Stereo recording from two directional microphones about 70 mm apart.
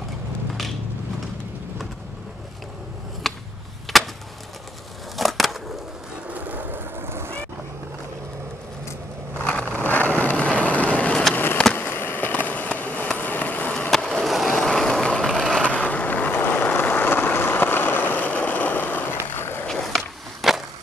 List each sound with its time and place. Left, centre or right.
3.3 s a sound: centre
5.1 s a sound: centre
6.2 s vehicle: right
9.4 s vehicle: centre
11.7 s a sound: left
13.8 s skateboard: centre
15.2 s vehicle: centre
15.6 s vehicle: centre
19.3 s skateboard: left
19.6 s skateboard: centre